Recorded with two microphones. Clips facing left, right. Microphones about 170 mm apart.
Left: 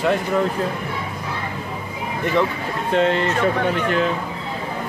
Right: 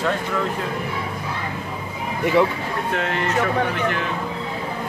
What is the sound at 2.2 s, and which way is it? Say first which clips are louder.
Speech: right 2 dB; 10° right (ahead or behind).